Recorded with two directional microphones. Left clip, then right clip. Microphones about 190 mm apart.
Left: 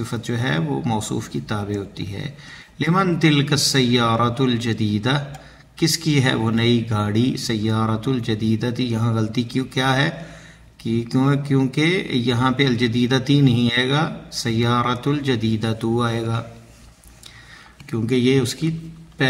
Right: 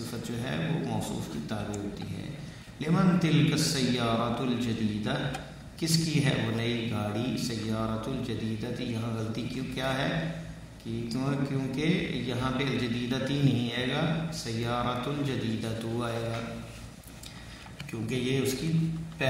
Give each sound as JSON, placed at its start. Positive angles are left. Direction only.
{"t": 0.1, "sound": "speech", "side_deg": 40}
{"t": 2.8, "sound": "speech", "side_deg": 40}
{"t": 18.0, "sound": "speech", "side_deg": 40}